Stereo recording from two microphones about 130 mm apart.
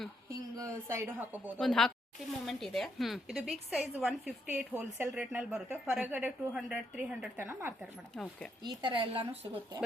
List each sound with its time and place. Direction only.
0.3 s a woman's voice: 25° right (ahead or behind)
1.5 s a woman's voice: 5° left (ahead or behind)
4.4 s a woman's voice: 15° right (ahead or behind)
8.1 s a woman's voice: 5° left (ahead or behind)
8.8 s a woman's voice: 40° right (ahead or behind)